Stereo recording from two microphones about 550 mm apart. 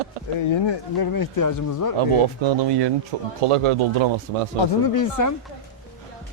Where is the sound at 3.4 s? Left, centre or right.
Right.